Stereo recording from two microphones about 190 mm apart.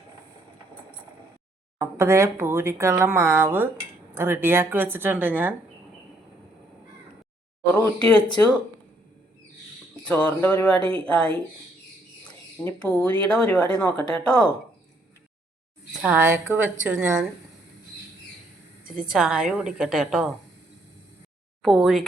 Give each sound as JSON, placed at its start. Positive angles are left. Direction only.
{"t": 1.8, "sound": "speech", "side_deg": -15}
{"t": 7.7, "sound": "a woman's voice", "side_deg": 5}
{"t": 10.0, "sound": "speech", "side_deg": 5}
{"t": 10.8, "sound": "speech", "side_deg": -30}
{"t": 11.0, "sound": "a woman's voice", "side_deg": 5}
{"t": 16.0, "sound": "speech", "side_deg": -10}
{"t": 19.1, "sound": "a woman's voice", "side_deg": -5}
{"t": 21.6, "sound": "speech", "side_deg": 0}